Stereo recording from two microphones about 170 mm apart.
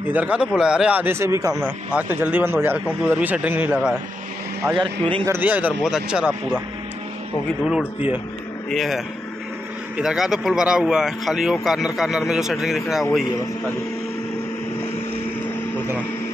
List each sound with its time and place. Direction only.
0.1 s a man's voice: 5° right (ahead or behind)
8.6 s speech: centre (ahead or behind)